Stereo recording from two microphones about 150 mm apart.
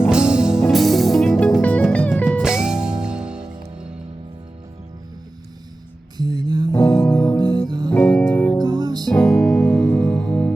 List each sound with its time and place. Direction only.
0.1 s music: 5° right (ahead or behind); by 2.2 s 10° left (ahead or behind)
2.4 s music: 5° right (ahead or behind)
6.1 s music: 25° right (ahead or behind)
6.7 s music: 20° left (ahead or behind)
7.3 s music: 25° right (ahead or behind)
8.2 s music: 15° left (ahead or behind)
8.6 s music: 25° right (ahead or behind)
9.1 s music: 5° left (ahead or behind)